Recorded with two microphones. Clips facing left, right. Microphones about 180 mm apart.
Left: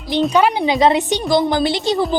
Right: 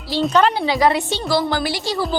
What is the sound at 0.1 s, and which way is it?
A woman's voice, 15° left (ahead or behind).